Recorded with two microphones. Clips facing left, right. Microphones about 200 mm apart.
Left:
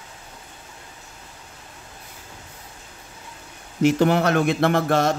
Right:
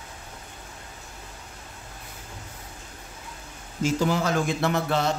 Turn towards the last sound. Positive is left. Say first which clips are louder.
# left 5 dB
turn(degrees=50)  # may be behind; listen again after turning